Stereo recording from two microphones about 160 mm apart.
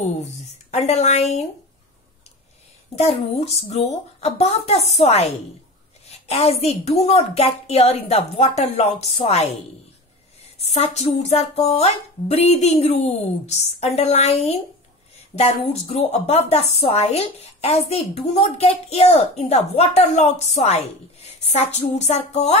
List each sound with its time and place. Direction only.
0.2 s speech: 45° left (ahead or behind)
3.0 s speech: 40° left (ahead or behind)
10.6 s speech: 40° left (ahead or behind)